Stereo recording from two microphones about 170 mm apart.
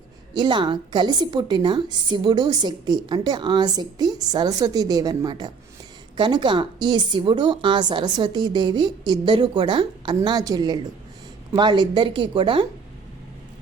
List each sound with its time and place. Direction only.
0.3 s a woman's voice: 25° right (ahead or behind)